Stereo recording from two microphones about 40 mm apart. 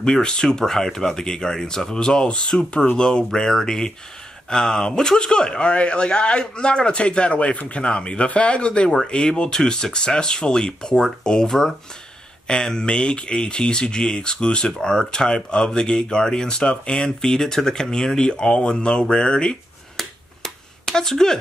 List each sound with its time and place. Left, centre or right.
0.0 s speech: centre
20.8 s speech: centre